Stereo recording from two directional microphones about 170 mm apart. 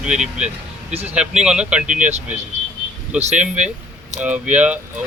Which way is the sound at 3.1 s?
10° right (ahead or behind).